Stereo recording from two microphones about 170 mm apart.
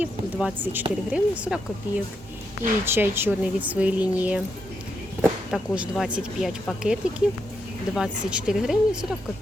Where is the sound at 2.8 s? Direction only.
15° right (ahead or behind).